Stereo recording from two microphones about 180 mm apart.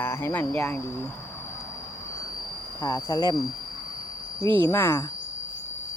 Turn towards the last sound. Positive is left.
turn(degrees=15)  # may be behind; listen again after turning